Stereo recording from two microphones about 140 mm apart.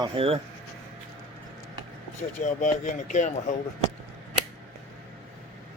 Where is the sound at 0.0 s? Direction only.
40° right (ahead or behind).